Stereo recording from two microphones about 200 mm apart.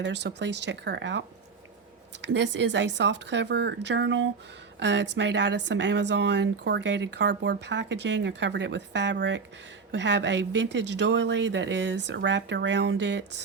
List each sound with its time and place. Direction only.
0.0 s speech: 60° right (ahead or behind)
2.2 s speech: 65° right (ahead or behind)